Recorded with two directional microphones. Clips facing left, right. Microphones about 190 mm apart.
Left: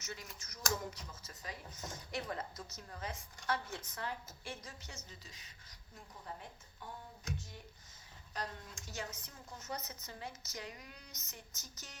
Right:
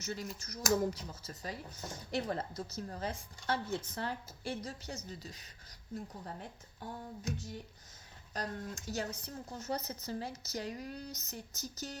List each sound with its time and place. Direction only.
0.0 s speech: 35° right (ahead or behind)
8.3 s speech: 40° right (ahead or behind)